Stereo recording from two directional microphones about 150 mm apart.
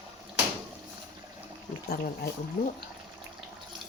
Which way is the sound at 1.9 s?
90° left.